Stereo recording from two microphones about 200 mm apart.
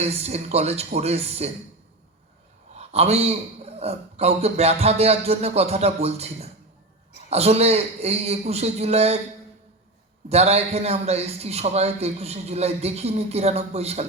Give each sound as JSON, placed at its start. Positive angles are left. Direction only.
{"t": 0.0, "sound": "a man's voice", "side_deg": -30}
{"t": 2.7, "sound": "a man's voice", "side_deg": -30}
{"t": 10.2, "sound": "a man's voice", "side_deg": -30}